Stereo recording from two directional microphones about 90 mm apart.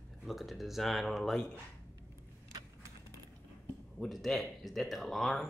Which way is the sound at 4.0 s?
5° left (ahead or behind).